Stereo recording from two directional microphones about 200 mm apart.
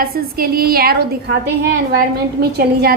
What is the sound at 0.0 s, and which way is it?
A woman's voice, 50° right (ahead or behind).